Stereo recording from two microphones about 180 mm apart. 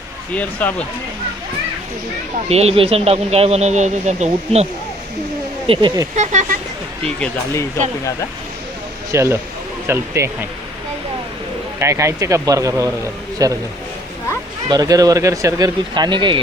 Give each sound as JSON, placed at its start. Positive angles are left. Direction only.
{"t": 0.6, "sound": "speech", "side_deg": 10}
{"t": 2.5, "sound": "speech", "side_deg": -35}
{"t": 6.1, "sound": "speech", "side_deg": -40}
{"t": 9.1, "sound": "speech", "side_deg": -15}
{"t": 11.8, "sound": "speech", "side_deg": -15}
{"t": 14.7, "sound": "speech", "side_deg": -20}